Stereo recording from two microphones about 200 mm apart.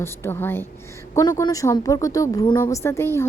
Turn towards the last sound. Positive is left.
turn(degrees=15)  # may be behind; listen again after turning